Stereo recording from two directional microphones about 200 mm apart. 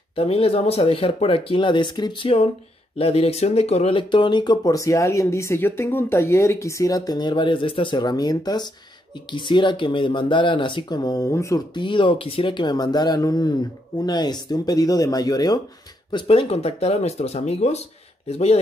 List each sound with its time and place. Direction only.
0.1 s speech: 25° left (ahead or behind)